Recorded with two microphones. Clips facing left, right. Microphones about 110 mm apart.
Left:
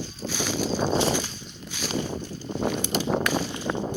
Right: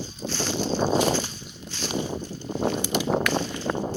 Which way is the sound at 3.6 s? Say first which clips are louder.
Right 1 dB; 20° right (ahead or behind).